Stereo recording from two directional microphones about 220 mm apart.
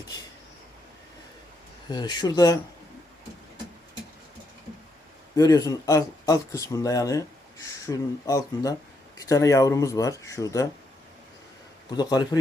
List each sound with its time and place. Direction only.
1.9 s speech: 20° left (ahead or behind)
5.4 s speech: 15° left (ahead or behind)
11.9 s speech: 20° left (ahead or behind)